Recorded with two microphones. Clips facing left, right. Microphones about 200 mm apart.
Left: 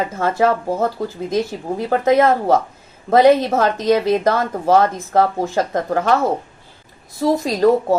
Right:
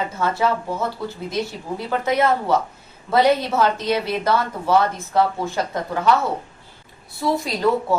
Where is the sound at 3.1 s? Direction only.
45° left (ahead or behind).